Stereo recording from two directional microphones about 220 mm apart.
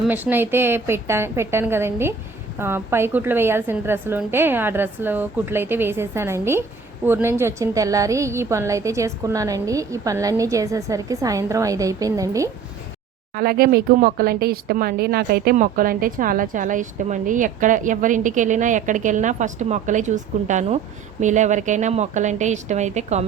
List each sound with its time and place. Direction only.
0.1 s a woman's voice: 10° right (ahead or behind)
13.3 s speech: 45° right (ahead or behind)